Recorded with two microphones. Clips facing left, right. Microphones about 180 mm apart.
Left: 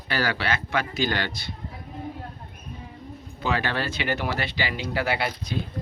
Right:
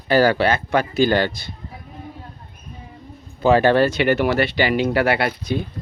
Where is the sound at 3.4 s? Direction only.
45° right (ahead or behind); by 5.3 s 65° right (ahead or behind).